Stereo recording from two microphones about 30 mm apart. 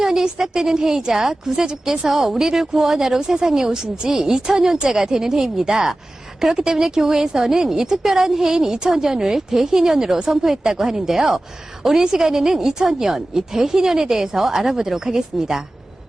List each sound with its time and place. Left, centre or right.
0.0 s a woman's voice: centre
1.9 s a woman's voice: centre